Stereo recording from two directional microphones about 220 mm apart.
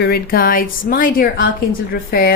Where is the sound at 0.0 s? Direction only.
45° left (ahead or behind).